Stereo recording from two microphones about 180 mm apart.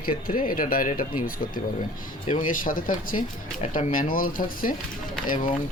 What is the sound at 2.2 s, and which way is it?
Speech, 45° left (ahead or behind).